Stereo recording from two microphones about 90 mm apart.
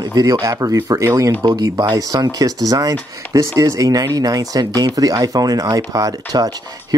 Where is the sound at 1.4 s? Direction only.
50° right (ahead or behind).